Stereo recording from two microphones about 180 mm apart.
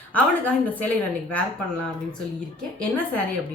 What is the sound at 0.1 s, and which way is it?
A woman's voice, 10° left (ahead or behind).